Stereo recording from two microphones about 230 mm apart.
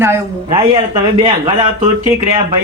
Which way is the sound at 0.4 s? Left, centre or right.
Right.